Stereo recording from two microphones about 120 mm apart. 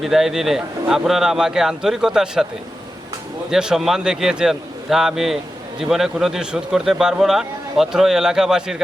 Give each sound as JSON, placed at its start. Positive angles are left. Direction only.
{"t": 0.0, "sound": "a man's voice", "side_deg": -5}
{"t": 3.5, "sound": "a man's voice", "side_deg": -5}